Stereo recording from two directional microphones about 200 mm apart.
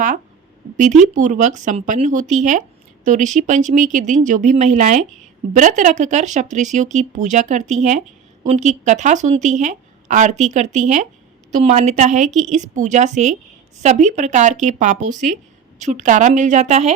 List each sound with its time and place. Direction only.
0.8 s speech: 40° right (ahead or behind)